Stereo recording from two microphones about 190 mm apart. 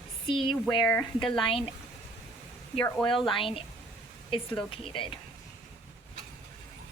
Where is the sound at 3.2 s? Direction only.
25° left (ahead or behind).